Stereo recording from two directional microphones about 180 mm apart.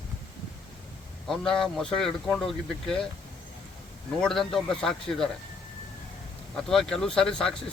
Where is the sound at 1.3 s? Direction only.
Centre (ahead or behind).